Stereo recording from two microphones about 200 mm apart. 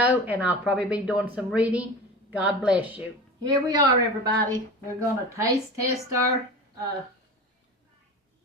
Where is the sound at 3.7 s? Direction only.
20° right (ahead or behind).